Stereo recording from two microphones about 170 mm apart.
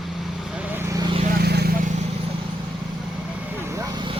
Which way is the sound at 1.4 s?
70° right (ahead or behind).